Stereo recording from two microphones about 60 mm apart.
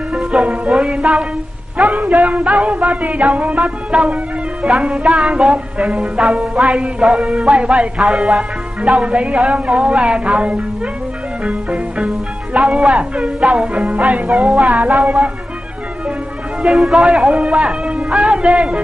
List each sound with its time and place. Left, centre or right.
0.1 s music: centre
2.0 s music: right; by 7.5 s centre
7.5 s music: centre
8.8 s music: centre
12.5 s speech: centre
12.9 s music: centre
16.6 s music: centre